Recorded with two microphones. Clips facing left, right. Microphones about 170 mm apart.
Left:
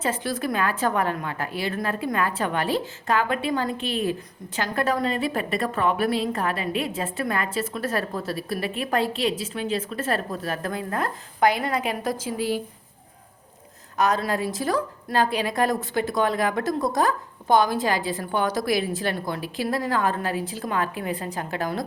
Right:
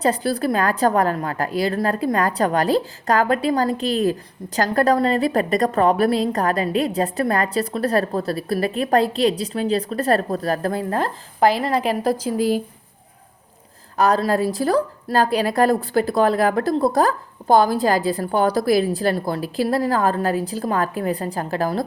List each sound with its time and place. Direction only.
0.0 s a woman's voice: 35° right (ahead or behind)
13.9 s a woman's voice: 35° right (ahead or behind)